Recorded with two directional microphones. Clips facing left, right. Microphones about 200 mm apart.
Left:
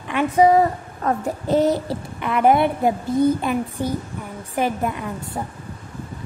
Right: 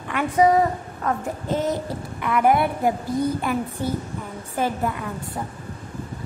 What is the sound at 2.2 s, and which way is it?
A woman's voice, 25° left (ahead or behind).